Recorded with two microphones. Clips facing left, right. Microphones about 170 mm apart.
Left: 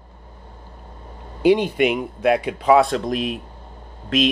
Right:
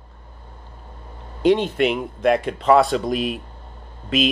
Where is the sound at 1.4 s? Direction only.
5° left (ahead or behind).